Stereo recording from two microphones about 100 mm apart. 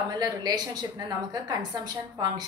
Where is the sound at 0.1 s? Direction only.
45° right (ahead or behind).